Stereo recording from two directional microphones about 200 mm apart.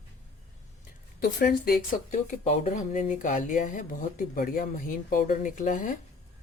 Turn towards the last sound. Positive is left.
turn(degrees=40)  # may be behind; listen again after turning